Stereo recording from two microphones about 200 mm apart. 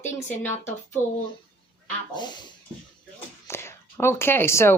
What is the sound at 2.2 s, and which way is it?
Speech, 20° left (ahead or behind).